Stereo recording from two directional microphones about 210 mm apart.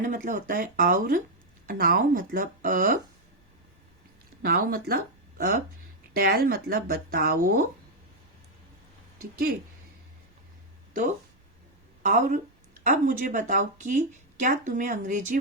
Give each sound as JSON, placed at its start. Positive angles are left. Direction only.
{"t": 0.0, "sound": "speech", "side_deg": -40}
{"t": 4.4, "sound": "speech", "side_deg": -45}
{"t": 6.1, "sound": "speech", "side_deg": -45}
{"t": 12.0, "sound": "speech", "side_deg": -35}